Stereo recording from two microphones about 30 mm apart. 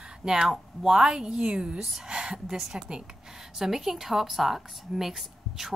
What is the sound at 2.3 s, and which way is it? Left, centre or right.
Speech, right.